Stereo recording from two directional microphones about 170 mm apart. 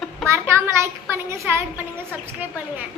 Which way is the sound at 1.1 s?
15° right (ahead or behind).